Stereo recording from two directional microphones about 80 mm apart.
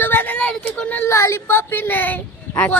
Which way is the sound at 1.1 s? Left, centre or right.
Left.